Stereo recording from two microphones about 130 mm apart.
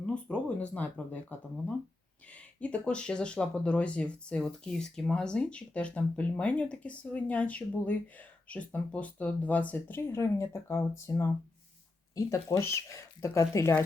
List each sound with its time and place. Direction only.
0.0 s speech: 10° left (ahead or behind)
2.6 s speech: 10° left (ahead or behind)